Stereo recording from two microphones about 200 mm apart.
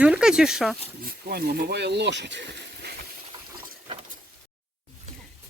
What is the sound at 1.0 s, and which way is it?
Speech, 50° right (ahead or behind).